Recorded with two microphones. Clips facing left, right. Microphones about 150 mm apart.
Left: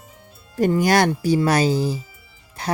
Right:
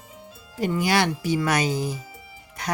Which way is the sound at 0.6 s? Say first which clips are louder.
Left 5 dB; 45° left (ahead or behind).